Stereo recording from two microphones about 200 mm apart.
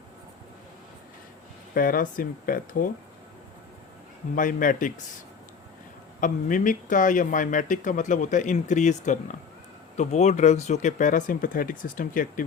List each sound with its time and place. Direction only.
1.7 s speech: 45° left (ahead or behind)
4.4 s speech: 40° left (ahead or behind)
6.1 s speech: 40° left (ahead or behind)